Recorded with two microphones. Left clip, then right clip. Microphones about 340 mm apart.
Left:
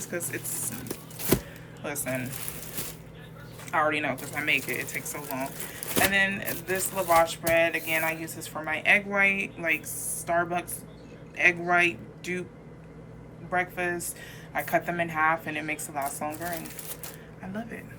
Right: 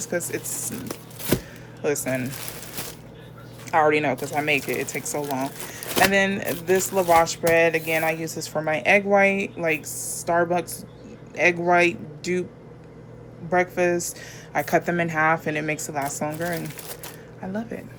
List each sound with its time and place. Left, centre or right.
0.1 s speech: centre
1.8 s speech: centre
3.7 s speech: centre
13.5 s speech: centre
17.4 s speech: centre